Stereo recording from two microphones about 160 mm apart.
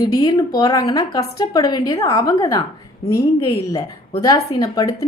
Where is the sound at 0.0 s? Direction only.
25° left (ahead or behind).